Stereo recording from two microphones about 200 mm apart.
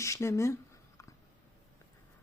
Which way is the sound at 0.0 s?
15° left (ahead or behind).